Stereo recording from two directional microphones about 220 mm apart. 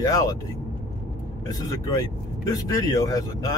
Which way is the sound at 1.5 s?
15° left (ahead or behind).